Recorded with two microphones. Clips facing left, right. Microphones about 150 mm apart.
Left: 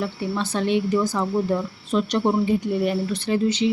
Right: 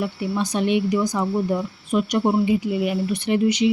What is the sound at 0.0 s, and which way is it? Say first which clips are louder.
Speech: right 2 dB; 15° right (ahead or behind).